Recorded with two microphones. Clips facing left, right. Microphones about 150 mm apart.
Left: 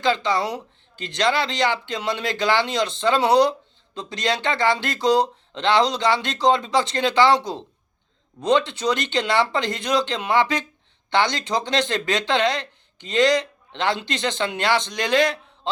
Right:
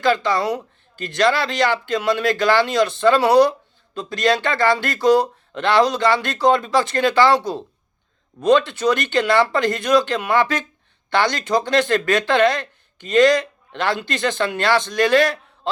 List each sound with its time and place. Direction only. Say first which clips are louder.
0.0 s speech: right 3 dB; 20° left (ahead or behind)